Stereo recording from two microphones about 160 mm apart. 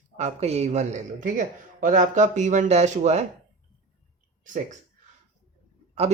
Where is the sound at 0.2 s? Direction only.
45° right (ahead or behind).